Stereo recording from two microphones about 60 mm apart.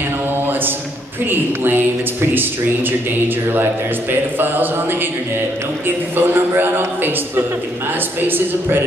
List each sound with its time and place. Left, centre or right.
1.2 s a man's voice: right
4.1 s a man's voice: right
6.1 s a man's voice: right